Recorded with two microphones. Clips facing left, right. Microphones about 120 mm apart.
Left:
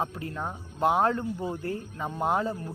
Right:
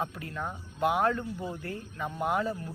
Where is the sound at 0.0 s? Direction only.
35° left (ahead or behind).